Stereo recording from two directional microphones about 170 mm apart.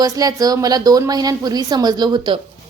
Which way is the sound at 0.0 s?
20° right (ahead or behind).